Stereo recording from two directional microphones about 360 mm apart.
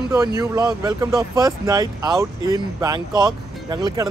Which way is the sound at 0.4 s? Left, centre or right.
Centre.